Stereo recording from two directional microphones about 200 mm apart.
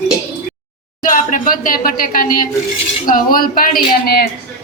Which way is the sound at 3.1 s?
45° left (ahead or behind).